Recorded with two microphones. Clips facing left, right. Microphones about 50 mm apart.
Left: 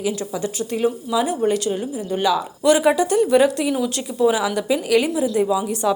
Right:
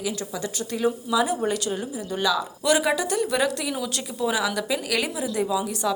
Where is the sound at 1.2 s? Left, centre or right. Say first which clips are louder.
Left 7 dB; centre.